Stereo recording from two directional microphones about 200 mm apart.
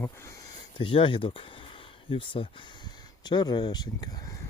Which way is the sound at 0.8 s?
25° left (ahead or behind).